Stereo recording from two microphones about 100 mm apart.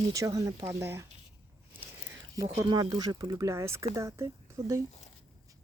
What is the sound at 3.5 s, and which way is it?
Speech, 30° right (ahead or behind).